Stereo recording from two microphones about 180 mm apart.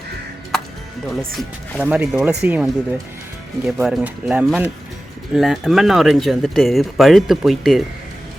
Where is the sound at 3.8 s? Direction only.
5° right (ahead or behind).